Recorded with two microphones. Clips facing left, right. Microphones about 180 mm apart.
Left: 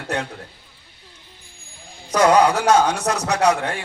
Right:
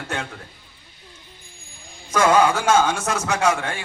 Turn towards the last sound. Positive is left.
turn(degrees=40)  # may be behind; listen again after turning